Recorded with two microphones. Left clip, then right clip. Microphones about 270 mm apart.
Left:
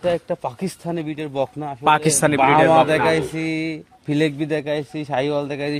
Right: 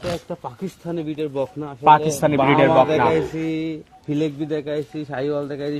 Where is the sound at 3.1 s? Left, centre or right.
Left.